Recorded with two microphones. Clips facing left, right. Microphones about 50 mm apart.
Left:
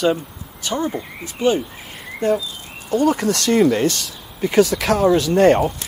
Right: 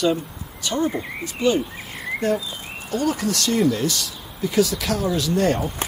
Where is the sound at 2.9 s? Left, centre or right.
Left.